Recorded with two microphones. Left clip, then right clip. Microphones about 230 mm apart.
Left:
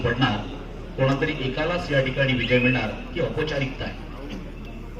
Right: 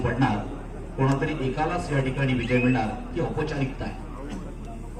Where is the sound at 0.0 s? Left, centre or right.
Right.